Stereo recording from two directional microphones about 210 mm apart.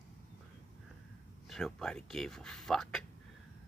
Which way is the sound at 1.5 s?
Centre (ahead or behind).